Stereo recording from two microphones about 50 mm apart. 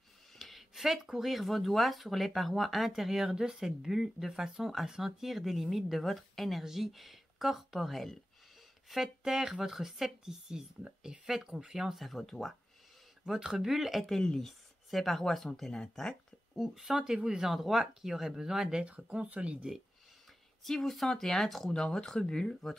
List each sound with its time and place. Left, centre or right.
0.4 s speech: centre
13.2 s speech: centre
16.5 s speech: centre
18.9 s speech: right
20.6 s speech: centre